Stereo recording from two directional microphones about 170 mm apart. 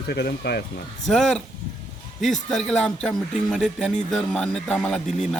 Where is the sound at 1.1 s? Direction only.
5° left (ahead or behind).